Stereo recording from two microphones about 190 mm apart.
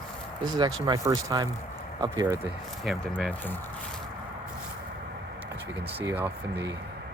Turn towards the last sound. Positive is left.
turn(degrees=-15)  # may be behind; listen again after turning